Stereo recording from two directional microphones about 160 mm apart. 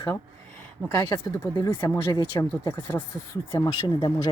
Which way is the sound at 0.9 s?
20° left (ahead or behind).